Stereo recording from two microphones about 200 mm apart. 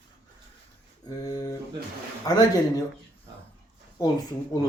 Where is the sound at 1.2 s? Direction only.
15° left (ahead or behind).